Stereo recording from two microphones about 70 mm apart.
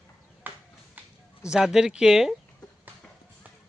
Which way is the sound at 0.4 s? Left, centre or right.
Right.